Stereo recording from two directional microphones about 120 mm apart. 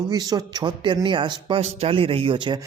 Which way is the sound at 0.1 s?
35° right (ahead or behind).